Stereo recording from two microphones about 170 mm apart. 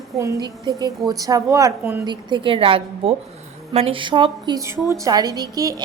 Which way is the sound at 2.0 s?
25° right (ahead or behind).